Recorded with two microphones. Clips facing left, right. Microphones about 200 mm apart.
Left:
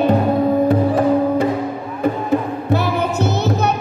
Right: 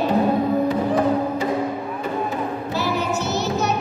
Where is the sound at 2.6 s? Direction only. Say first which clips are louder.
Left 4 dB; 60° left (ahead or behind).